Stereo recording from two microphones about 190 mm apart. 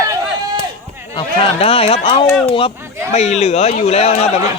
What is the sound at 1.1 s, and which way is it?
Speech, 30° left (ahead or behind).